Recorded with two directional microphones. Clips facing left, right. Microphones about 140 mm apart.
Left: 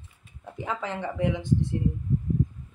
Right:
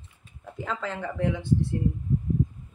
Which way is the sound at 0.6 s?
20° left (ahead or behind).